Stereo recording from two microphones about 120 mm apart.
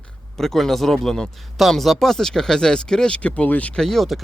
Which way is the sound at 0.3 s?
5° left (ahead or behind).